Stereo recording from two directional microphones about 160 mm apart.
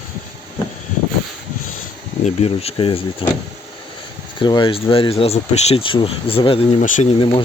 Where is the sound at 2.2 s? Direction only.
40° left (ahead or behind).